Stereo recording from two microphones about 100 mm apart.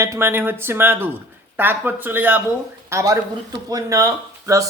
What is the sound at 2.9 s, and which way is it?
Speech, 30° right (ahead or behind).